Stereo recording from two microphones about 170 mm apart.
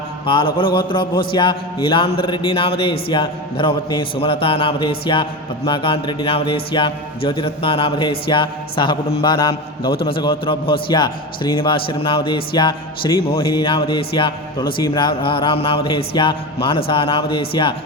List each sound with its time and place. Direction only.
0.3 s a man's voice: 30° left (ahead or behind)
9.9 s a man's voice: 65° left (ahead or behind)
10.2 s a man's voice: 30° left (ahead or behind)